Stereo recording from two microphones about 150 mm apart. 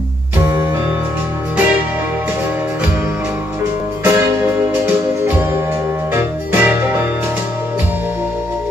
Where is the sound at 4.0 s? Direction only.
15° right (ahead or behind).